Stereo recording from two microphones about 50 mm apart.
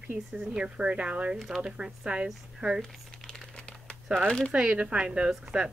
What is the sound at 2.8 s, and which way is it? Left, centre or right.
Crumpling, centre.